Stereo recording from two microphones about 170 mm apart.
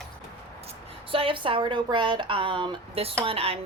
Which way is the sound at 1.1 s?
30° right (ahead or behind).